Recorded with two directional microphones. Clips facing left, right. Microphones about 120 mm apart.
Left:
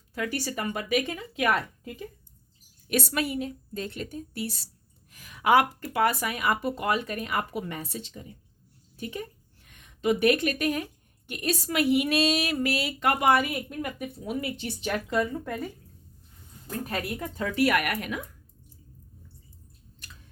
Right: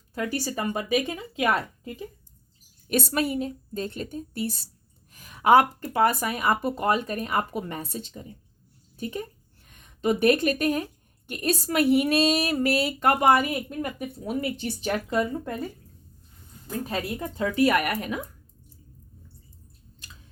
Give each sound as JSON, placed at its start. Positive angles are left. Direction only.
{"t": 0.1, "sound": "speech", "side_deg": -35}
{"t": 3.1, "sound": "speech", "side_deg": -35}
{"t": 16.8, "sound": "speech", "side_deg": -25}